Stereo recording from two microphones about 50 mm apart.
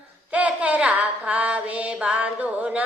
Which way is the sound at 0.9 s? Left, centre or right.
Right.